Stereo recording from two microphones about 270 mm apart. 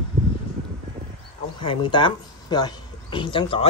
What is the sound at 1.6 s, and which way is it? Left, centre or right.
Speech, centre.